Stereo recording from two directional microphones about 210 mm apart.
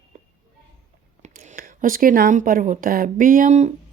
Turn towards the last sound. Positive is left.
turn(degrees=-35)  # may be behind; listen again after turning